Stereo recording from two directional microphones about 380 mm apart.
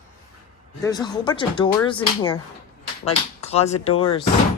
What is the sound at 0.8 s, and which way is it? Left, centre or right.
Speech, centre.